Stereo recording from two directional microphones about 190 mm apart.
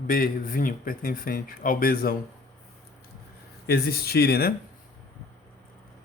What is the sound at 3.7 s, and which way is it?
Speech, 55° left (ahead or behind).